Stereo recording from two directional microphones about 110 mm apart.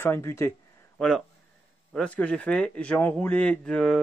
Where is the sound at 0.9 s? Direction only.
5° left (ahead or behind).